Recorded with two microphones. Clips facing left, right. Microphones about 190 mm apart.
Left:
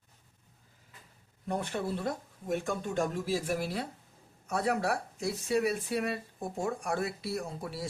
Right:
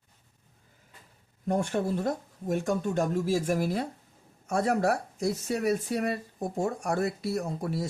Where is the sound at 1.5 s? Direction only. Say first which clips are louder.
Right 6 dB; 45° right (ahead or behind).